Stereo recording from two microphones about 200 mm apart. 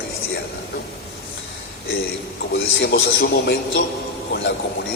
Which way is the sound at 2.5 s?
65° left (ahead or behind).